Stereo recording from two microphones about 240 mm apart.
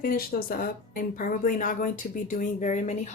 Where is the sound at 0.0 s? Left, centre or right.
Left.